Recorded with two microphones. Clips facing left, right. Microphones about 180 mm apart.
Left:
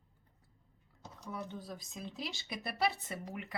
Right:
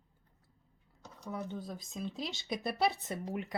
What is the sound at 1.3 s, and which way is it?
Speech, 25° right (ahead or behind).